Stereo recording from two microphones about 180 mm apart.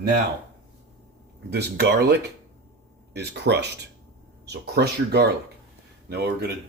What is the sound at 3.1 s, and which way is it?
Speech, 70° right (ahead or behind).